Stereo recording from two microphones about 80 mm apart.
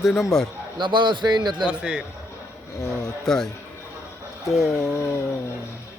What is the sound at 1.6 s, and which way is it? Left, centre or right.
Speech, centre.